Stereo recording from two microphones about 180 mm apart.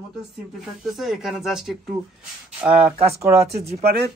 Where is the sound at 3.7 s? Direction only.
40° right (ahead or behind).